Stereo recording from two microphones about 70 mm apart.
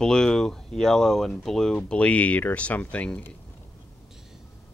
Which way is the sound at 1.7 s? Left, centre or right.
Centre.